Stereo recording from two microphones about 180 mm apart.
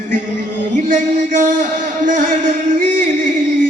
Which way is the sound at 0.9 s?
45° right (ahead or behind).